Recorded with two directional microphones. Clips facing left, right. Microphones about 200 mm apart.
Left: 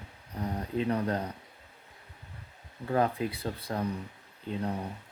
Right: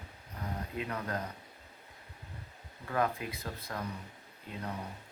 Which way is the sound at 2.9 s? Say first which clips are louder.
Left 5 dB; 30° left (ahead or behind).